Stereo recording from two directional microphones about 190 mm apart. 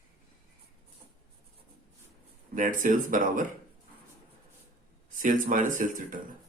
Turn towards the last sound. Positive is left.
turn(degrees=-45)  # may be behind; listen again after turning